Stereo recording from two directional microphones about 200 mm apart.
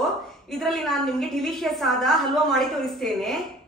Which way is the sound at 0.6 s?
Centre (ahead or behind).